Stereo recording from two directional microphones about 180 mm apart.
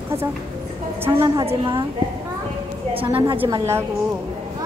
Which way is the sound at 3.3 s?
15° right (ahead or behind).